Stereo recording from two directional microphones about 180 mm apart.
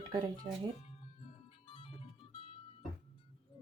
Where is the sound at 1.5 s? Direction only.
30° left (ahead or behind).